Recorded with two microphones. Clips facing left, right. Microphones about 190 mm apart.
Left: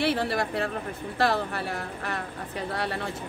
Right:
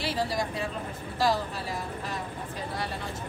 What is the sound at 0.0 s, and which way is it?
Speech, 65° left (ahead or behind).